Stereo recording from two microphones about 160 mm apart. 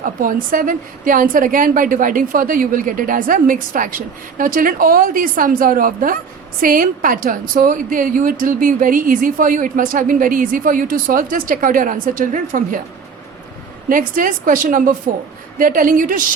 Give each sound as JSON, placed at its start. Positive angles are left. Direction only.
{"t": 0.0, "sound": "a woman's voice", "side_deg": -60}
{"t": 13.9, "sound": "a woman's voice", "side_deg": -55}